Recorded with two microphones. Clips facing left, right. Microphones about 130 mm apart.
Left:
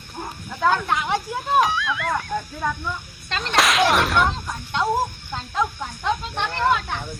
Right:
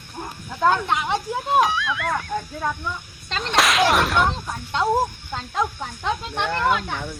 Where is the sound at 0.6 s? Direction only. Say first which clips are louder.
Right 1 dB; 20° right (ahead or behind).